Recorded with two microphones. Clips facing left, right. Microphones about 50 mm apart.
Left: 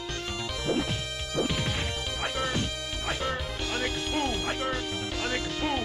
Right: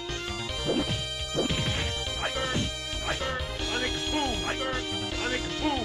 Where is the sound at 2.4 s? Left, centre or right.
Centre.